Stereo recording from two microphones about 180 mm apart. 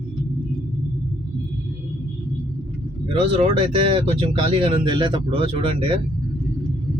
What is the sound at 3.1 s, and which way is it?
Speech, 35° right (ahead or behind).